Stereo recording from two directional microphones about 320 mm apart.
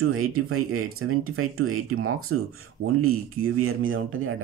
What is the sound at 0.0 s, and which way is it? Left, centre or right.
Speech, right.